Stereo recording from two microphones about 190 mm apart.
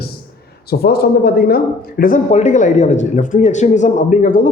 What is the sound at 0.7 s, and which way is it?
A man's voice, 55° left (ahead or behind).